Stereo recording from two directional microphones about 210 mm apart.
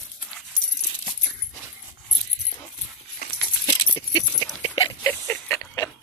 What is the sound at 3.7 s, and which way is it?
Keys jangling, 20° left (ahead or behind).